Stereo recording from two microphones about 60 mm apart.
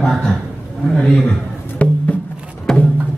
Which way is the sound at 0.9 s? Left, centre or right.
Centre.